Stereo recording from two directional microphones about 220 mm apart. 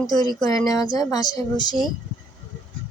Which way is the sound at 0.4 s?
15° left (ahead or behind).